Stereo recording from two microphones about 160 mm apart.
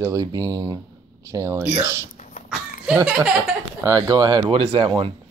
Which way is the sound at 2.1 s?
55° left (ahead or behind).